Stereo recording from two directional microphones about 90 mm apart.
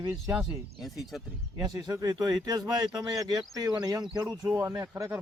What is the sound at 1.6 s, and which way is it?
Speech, 45° right (ahead or behind).